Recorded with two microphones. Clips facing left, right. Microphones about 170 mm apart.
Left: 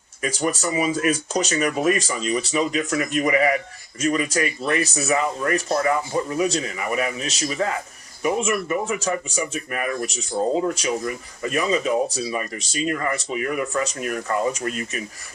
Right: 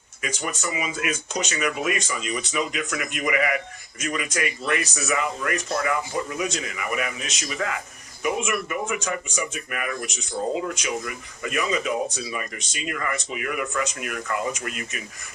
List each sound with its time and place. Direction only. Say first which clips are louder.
0.2 s speech: left 6 dB; 40° left (ahead or behind)